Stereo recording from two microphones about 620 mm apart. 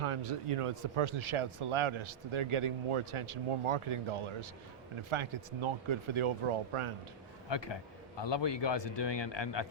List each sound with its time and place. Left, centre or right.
0.0 s a man's voice: right
7.5 s speech: left